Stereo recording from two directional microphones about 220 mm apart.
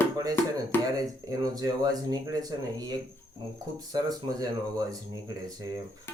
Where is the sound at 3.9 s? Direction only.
15° right (ahead or behind).